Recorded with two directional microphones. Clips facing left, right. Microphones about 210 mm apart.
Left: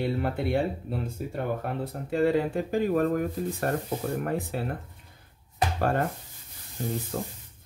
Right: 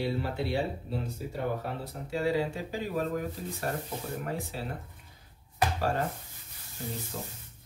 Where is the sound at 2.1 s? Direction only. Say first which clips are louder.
Left 5 dB; 55° left (ahead or behind).